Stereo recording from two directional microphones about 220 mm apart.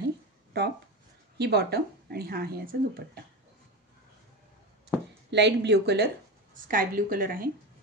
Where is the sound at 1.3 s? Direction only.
45° right (ahead or behind).